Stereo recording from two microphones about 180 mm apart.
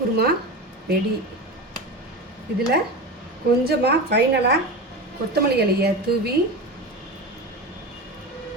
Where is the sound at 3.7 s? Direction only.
65° right (ahead or behind).